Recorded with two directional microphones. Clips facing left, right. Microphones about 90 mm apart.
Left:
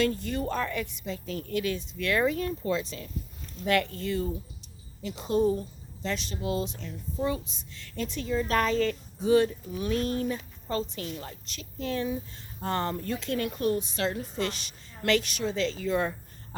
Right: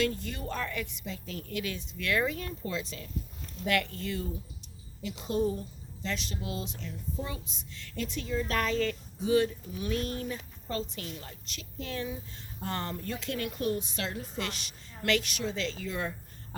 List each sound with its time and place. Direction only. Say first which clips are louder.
0.0 s a woman's voice: left 4 dB; 40° left (ahead or behind)